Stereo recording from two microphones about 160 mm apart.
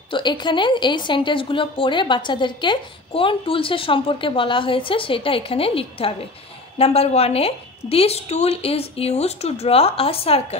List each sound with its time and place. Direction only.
0.1 s a woman's voice: 30° left (ahead or behind)